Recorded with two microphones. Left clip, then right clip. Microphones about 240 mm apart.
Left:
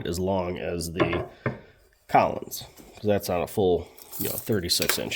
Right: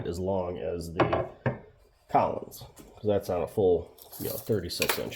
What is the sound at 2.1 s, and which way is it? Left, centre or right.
Speech, left.